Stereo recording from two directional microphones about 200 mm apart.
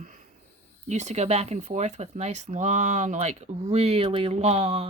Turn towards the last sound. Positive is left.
turn(degrees=-30)  # may be behind; listen again after turning